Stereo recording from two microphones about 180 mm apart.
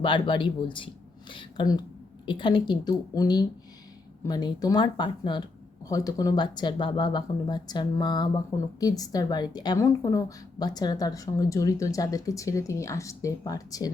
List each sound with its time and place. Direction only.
0.0 s a woman's voice: 25° left (ahead or behind)